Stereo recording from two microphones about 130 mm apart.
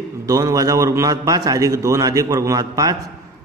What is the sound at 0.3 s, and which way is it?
A man's voice, 30° right (ahead or behind).